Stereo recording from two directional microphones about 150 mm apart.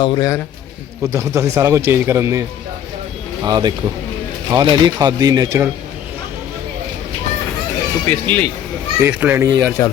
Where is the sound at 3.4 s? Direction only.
25° right (ahead or behind).